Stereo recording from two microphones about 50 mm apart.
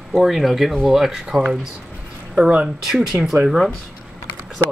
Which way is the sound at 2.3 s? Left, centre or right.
Centre.